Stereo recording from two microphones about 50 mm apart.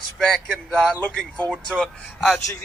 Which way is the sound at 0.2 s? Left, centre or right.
Centre.